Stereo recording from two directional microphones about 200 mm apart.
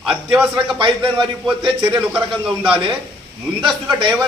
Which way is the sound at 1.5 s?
Centre (ahead or behind).